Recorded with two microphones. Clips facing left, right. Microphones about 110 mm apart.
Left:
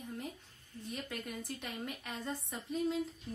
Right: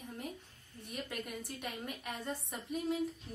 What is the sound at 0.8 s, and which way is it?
A woman's voice, 15° right (ahead or behind).